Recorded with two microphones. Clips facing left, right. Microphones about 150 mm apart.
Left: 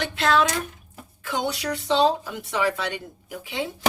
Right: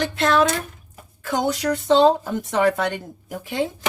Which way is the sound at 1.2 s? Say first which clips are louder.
Right 5 dB; 45° right (ahead or behind).